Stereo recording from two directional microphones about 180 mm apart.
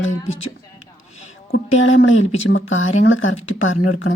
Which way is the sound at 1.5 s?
75° left (ahead or behind).